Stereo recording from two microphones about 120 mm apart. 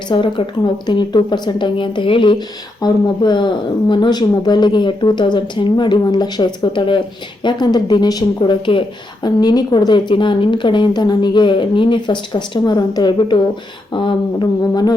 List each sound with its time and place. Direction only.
0.1 s speech: 45° left (ahead or behind)